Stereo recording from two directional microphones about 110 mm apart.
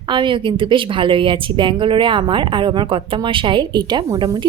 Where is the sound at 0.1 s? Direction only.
45° right (ahead or behind).